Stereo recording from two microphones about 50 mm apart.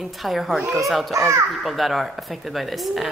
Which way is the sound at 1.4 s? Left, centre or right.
Centre.